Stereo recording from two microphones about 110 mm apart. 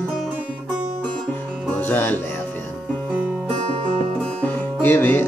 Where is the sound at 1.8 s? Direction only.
15° left (ahead or behind).